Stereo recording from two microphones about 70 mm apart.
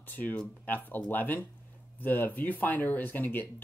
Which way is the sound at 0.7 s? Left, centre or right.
Left.